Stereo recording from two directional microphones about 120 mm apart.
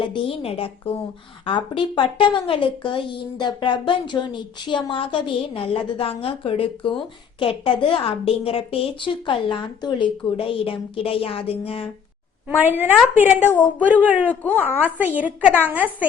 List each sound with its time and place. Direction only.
0.0 s a woman's voice: 45° left (ahead or behind)
12.5 s a woman's voice: 15° right (ahead or behind)
13.4 s speech: 15° left (ahead or behind)
13.8 s a woman's voice: 15° right (ahead or behind)
14.3 s speech: 15° left (ahead or behind)
14.8 s a woman's voice: 15° right (ahead or behind)